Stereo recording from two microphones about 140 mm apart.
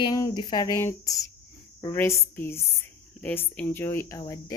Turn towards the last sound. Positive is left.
turn(degrees=25)  # may be behind; listen again after turning